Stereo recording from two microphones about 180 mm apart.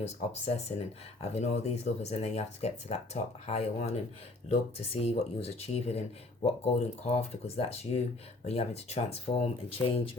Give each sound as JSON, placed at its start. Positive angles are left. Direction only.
{"t": 0.0, "sound": "speech", "side_deg": 35}